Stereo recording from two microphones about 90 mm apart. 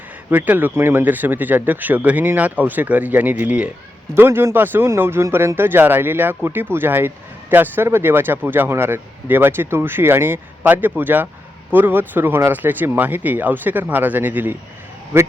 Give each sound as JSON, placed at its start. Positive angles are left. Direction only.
{"t": 0.3, "sound": "speech", "side_deg": -20}
{"t": 4.1, "sound": "speech", "side_deg": -25}